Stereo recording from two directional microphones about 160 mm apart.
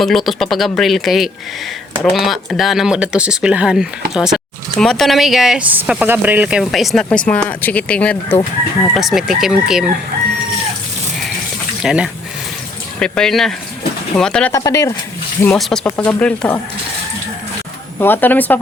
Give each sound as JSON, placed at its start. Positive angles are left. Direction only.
{"t": 0.0, "sound": "speech", "side_deg": 0}
{"t": 9.0, "sound": "speech", "side_deg": 0}
{"t": 11.8, "sound": "speech", "side_deg": -5}
{"t": 14.5, "sound": "speech", "side_deg": 20}
{"t": 15.4, "sound": "speech", "side_deg": 5}
{"t": 18.0, "sound": "speech", "side_deg": 10}